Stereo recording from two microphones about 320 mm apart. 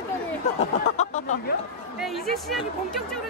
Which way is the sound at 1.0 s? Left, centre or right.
Left.